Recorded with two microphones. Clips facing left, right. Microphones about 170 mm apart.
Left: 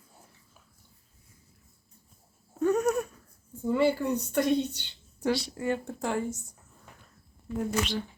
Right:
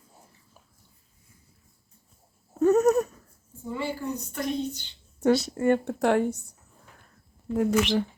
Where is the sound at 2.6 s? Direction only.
40° right (ahead or behind).